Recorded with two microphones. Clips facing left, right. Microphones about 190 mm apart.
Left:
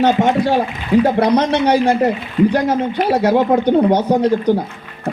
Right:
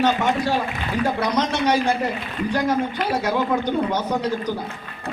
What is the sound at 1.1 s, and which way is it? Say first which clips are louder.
Speech: left 8 dB; 60° left (ahead or behind).